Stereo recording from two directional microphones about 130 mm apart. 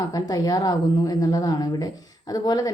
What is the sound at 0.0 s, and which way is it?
A woman's voice, 30° left (ahead or behind).